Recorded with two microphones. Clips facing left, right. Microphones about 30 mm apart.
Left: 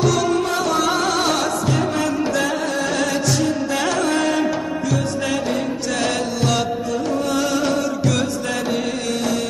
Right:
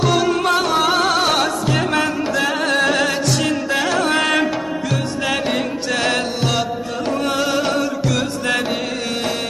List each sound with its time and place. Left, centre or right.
0.1 s music: right
0.4 s music: right
1.3 s music: right
2.2 s music: centre
2.6 s music: right
2.9 s music: right
3.8 s music: right
4.0 s music: right
5.9 s music: right
7.1 s music: right
7.3 s music: right